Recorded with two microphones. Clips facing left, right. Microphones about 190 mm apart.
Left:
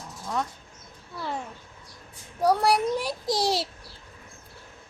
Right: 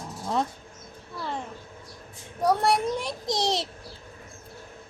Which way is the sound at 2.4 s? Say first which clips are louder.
Left 1 dB; 5° left (ahead or behind).